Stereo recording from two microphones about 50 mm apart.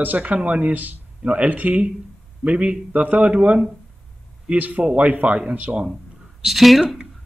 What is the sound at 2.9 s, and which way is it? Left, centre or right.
Speech, right.